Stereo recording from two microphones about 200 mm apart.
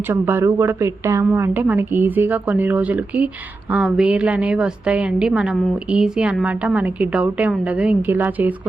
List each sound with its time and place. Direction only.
0.1 s a woman's voice: 10° right (ahead or behind)